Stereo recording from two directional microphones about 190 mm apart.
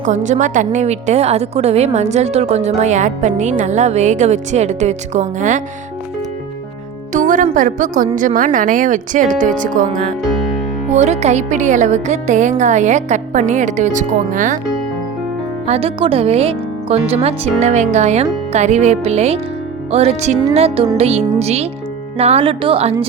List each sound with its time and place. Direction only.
0.0 s a woman's voice: 40° right (ahead or behind)
7.1 s music: 45° right (ahead or behind)
7.5 s a woman's voice: 45° right (ahead or behind)
15.6 s a woman's voice: 30° right (ahead or behind)